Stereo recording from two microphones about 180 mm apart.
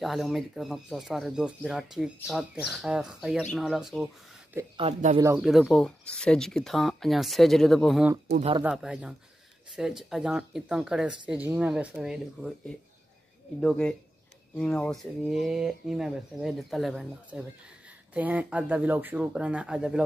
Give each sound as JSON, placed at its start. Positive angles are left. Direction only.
{"t": 0.0, "sound": "speech", "side_deg": 0}
{"t": 4.7, "sound": "speech", "side_deg": -30}
{"t": 5.4, "sound": "speech", "side_deg": 0}
{"t": 8.3, "sound": "speech", "side_deg": -35}
{"t": 8.6, "sound": "speech", "side_deg": -5}